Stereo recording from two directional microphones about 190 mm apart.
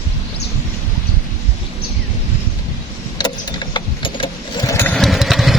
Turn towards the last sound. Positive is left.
turn(degrees=0)  # may be behind; listen again after turning